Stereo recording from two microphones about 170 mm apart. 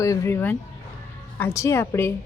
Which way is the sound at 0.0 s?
15° left (ahead or behind).